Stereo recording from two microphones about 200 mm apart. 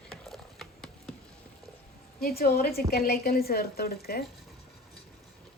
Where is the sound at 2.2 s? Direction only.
50° left (ahead or behind).